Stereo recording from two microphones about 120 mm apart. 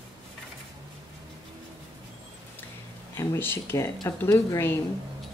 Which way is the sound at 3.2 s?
20° left (ahead or behind).